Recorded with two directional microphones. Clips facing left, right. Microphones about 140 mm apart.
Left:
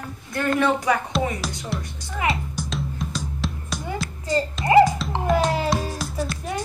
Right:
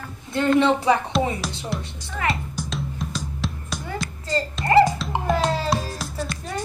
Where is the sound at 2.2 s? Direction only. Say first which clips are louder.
Left 1 dB; centre (ahead or behind).